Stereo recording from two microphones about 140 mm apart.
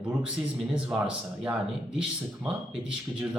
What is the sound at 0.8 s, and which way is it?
Speech, 5° right (ahead or behind).